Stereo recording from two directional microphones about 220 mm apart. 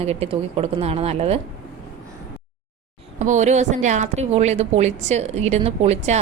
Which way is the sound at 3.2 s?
35° right (ahead or behind).